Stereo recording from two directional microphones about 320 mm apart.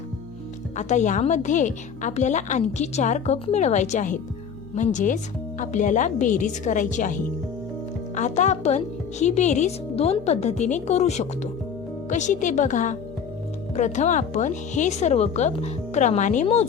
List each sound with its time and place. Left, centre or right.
0.8 s a woman's voice: left